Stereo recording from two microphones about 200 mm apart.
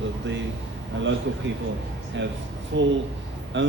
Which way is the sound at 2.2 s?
65° right (ahead or behind).